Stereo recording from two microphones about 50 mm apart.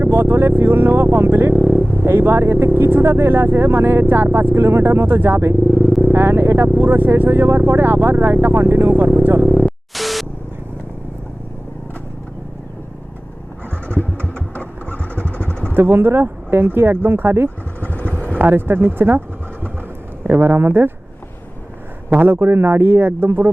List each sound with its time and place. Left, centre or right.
0.0 s speech: right
9.9 s a sound: centre
14.5 s vehicle: left
15.7 s speech: right
17.7 s vehicle: left
18.2 s speech: right
20.2 s speech: right
22.1 s speech: right